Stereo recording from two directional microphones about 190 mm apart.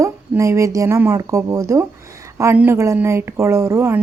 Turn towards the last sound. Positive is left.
turn(degrees=-15)  # may be behind; listen again after turning